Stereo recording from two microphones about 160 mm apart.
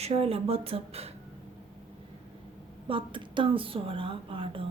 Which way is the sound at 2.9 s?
30° right (ahead or behind).